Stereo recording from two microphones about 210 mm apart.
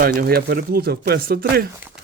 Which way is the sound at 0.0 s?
45° right (ahead or behind).